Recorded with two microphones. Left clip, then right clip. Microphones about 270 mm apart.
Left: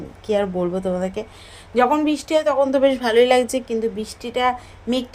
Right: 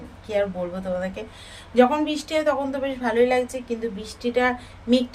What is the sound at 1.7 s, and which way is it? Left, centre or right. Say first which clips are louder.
A woman's voice: left 2 dB; left.